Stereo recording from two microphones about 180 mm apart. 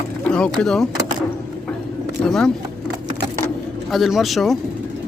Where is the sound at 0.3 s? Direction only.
5° left (ahead or behind).